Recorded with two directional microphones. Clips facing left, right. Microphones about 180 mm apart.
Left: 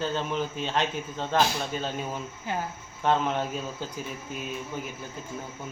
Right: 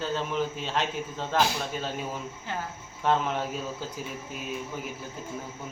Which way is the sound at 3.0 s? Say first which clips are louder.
Left 1 dB; 5° right (ahead or behind).